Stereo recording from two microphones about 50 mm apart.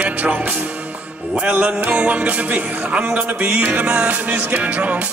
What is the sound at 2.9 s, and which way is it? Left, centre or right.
Speech, centre.